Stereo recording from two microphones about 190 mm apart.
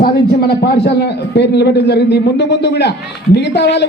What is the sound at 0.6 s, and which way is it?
A man's voice, 60° left (ahead or behind).